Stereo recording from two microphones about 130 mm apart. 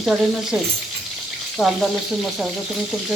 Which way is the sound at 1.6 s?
Centre (ahead or behind).